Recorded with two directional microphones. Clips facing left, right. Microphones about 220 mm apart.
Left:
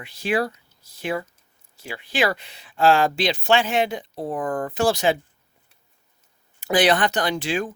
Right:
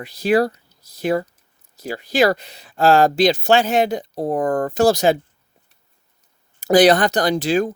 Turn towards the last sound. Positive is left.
turn(degrees=-40)  # may be behind; listen again after turning